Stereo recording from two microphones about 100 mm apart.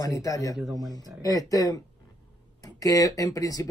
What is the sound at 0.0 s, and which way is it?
Speech, 35° left (ahead or behind).